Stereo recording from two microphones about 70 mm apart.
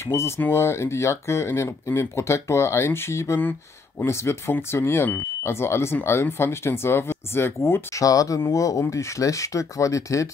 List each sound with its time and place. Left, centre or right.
0.4 s speech: left
8.0 s speech: left